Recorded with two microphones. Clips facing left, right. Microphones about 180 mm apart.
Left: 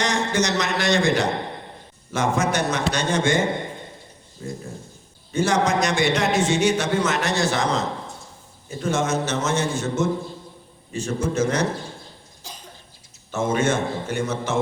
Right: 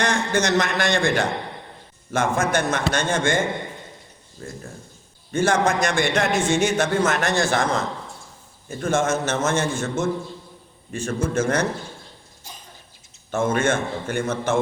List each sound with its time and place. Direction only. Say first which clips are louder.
0.0 s a man's voice: right 1 dB; 55° right (ahead or behind)
5.3 s a man's voice: right 1 dB; 50° right (ahead or behind)
13.3 s a man's voice: right 1 dB; 55° right (ahead or behind)